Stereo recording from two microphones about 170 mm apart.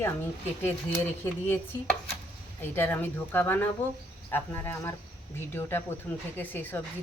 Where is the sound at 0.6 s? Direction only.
10° left (ahead or behind).